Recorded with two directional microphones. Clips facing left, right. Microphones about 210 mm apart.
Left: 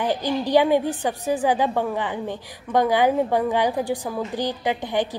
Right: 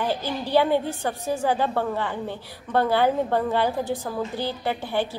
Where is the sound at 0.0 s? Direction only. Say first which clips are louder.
Left 4 dB; 15° left (ahead or behind).